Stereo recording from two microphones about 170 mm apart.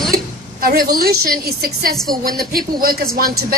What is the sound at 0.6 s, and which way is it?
A woman's voice, 60° right (ahead or behind).